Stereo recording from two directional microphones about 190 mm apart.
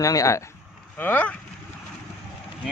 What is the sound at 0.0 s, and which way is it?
Speech, 15° left (ahead or behind).